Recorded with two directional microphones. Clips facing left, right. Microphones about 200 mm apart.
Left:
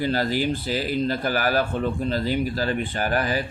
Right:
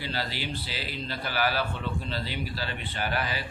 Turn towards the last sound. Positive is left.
turn(degrees=45)  # may be behind; listen again after turning